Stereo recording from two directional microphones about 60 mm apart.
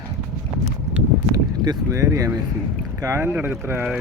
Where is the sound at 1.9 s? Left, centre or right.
Right.